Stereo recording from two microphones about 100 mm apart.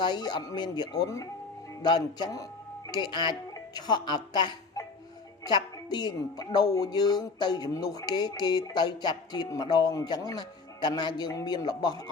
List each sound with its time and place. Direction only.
0.0 s a woman's voice: 45° left (ahead or behind)